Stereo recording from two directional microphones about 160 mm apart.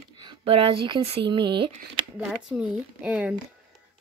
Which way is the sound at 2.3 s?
5° right (ahead or behind).